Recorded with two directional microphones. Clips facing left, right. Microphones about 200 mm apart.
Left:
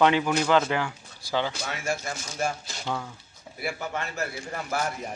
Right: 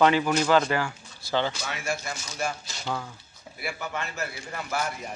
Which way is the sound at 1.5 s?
45° left (ahead or behind).